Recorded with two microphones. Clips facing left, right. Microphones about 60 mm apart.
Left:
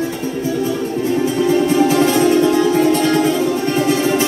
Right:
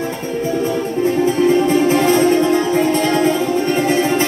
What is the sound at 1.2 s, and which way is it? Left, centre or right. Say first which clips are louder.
Music: right 1 dB; right.